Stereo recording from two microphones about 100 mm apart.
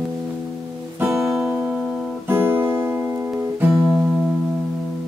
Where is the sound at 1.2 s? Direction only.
Centre (ahead or behind).